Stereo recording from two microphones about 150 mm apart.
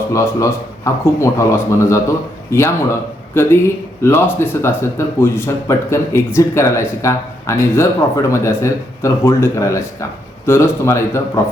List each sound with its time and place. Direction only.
0.1 s a man's voice: 20° left (ahead or behind)